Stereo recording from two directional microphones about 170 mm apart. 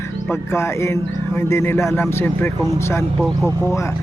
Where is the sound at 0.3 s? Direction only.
15° left (ahead or behind).